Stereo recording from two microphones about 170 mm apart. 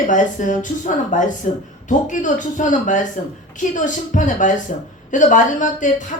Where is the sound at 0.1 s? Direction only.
50° left (ahead or behind).